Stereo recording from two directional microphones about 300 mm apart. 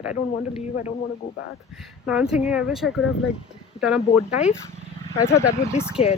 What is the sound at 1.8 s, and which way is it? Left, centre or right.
Speech, centre.